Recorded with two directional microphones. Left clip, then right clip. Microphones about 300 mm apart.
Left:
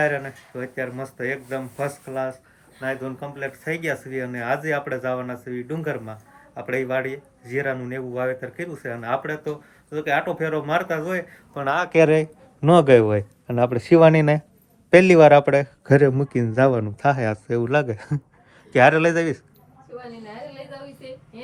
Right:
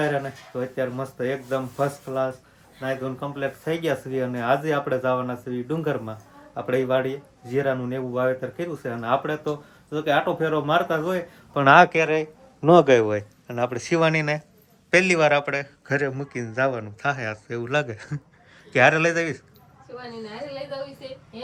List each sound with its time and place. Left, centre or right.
0.0 s speech: centre
11.5 s speech: right
11.9 s speech: centre